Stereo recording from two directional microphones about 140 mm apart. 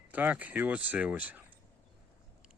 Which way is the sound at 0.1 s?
10° right (ahead or behind).